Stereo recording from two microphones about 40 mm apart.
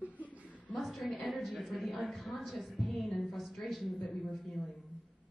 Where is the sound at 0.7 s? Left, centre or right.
Centre.